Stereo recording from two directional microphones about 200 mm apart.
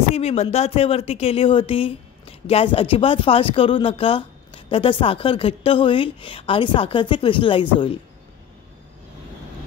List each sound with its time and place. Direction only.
0.1 s speech: 30° left (ahead or behind)